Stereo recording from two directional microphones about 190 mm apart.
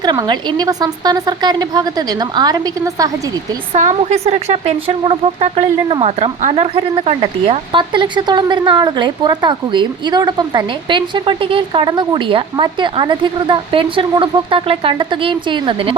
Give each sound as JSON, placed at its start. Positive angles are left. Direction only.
{"t": 0.0, "sound": "speech", "side_deg": -20}
{"t": 3.8, "sound": "speech", "side_deg": -40}